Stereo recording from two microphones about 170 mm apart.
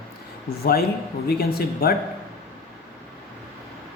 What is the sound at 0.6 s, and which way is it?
A woman's voice, 65° left (ahead or behind).